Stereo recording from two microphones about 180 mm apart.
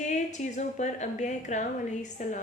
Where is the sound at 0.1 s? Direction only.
40° left (ahead or behind).